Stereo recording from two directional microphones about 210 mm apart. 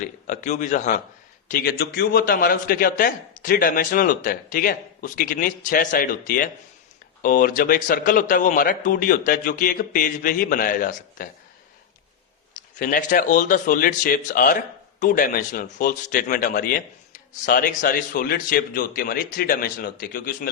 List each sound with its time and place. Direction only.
0.0 s a man's voice: 35° left (ahead or behind)
1.5 s a man's voice: 45° left (ahead or behind)
12.8 s a man's voice: 40° left (ahead or behind)